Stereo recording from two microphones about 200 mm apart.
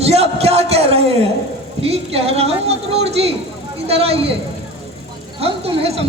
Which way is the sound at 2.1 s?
30° right (ahead or behind).